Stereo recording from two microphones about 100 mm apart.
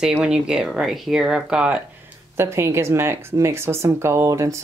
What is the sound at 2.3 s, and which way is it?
Speech, 25° right (ahead or behind).